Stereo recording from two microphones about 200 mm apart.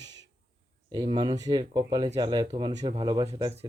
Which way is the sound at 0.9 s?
25° right (ahead or behind).